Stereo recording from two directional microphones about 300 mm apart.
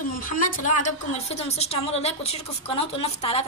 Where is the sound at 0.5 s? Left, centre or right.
Left.